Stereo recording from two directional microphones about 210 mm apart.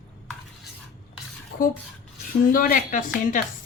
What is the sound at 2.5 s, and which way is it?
Speech, 40° left (ahead or behind).